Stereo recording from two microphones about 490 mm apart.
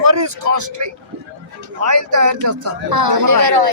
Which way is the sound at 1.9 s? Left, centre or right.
Right.